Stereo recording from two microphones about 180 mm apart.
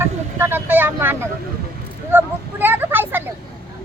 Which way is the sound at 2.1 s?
10° right (ahead or behind).